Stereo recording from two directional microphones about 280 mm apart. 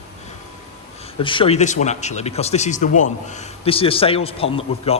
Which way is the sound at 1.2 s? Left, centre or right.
Centre.